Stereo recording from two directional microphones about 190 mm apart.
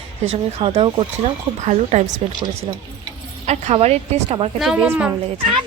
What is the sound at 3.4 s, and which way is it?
Speech, 35° right (ahead or behind).